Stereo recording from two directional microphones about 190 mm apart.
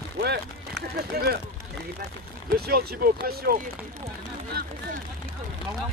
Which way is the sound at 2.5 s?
55° right (ahead or behind).